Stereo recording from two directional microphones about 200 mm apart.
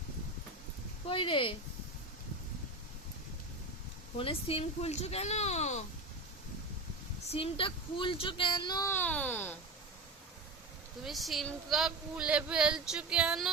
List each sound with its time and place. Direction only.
1.0 s speech: 25° left (ahead or behind)
4.2 s speech: 30° left (ahead or behind)
7.3 s speech: 30° left (ahead or behind); by 9.6 s 10° left (ahead or behind)
11.0 s a woman's voice: centre (ahead or behind)